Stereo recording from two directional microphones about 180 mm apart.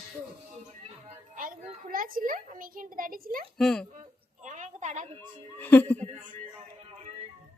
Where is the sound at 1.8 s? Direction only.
50° right (ahead or behind).